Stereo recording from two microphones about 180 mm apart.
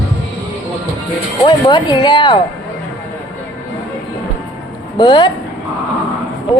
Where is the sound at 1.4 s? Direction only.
25° left (ahead or behind).